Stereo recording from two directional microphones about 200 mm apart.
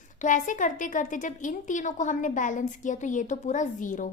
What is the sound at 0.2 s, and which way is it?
A woman's voice, 40° left (ahead or behind).